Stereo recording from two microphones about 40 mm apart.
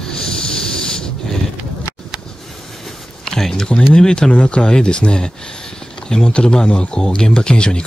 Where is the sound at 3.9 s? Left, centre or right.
Centre.